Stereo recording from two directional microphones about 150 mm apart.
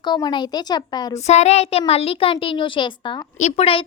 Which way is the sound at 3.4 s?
45° left (ahead or behind).